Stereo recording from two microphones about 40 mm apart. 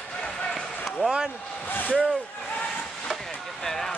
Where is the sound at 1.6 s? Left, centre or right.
Left.